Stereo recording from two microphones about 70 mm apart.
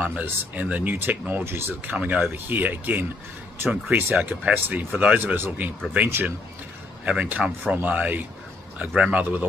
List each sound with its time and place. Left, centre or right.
0.0 s speech: right
4.1 s speech: right
7.1 s speech: right